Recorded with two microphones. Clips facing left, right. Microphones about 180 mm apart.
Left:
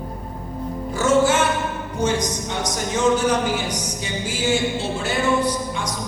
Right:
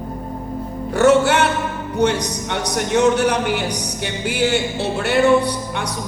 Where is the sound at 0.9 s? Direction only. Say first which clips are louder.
Right 4 dB; 65° right (ahead or behind).